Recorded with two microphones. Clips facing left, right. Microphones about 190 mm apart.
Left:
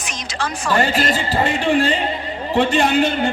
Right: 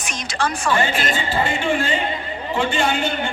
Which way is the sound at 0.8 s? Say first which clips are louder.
Left 3 dB; 40° left (ahead or behind).